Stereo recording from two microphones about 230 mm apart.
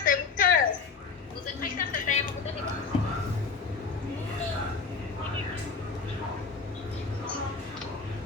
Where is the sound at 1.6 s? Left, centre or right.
Left.